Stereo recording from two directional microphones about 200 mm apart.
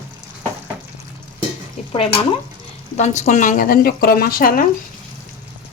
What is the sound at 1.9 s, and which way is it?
Speech, 25° left (ahead or behind).